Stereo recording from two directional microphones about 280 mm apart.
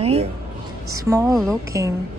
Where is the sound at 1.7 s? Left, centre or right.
Centre.